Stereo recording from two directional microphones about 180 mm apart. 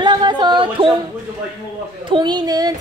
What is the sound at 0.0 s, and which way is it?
Yodeling, 25° right (ahead or behind).